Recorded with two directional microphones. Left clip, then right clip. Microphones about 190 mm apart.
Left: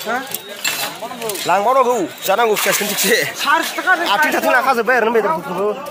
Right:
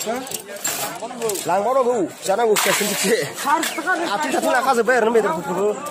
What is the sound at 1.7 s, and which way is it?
A man's voice, 10° left (ahead or behind).